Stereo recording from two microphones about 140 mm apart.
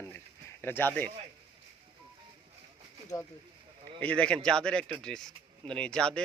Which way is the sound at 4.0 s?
10° left (ahead or behind).